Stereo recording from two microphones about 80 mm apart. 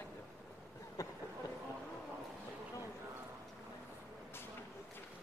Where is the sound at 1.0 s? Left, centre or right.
Left.